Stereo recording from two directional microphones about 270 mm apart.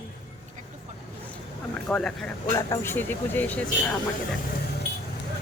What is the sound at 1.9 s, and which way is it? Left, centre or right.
Speech, centre.